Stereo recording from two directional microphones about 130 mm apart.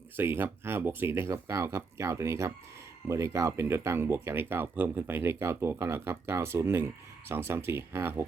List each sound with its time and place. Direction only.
0.2 s speech: 15° right (ahead or behind)